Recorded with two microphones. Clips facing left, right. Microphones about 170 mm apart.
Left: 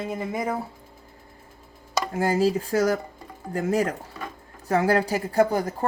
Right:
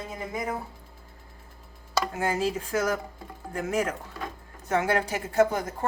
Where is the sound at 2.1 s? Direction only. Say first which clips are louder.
Left 8 dB; 35° left (ahead or behind).